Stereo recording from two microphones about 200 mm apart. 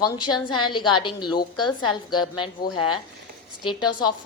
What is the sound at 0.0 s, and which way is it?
A woman's voice, 20° left (ahead or behind).